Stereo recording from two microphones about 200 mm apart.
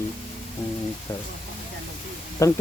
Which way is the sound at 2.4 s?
15° left (ahead or behind).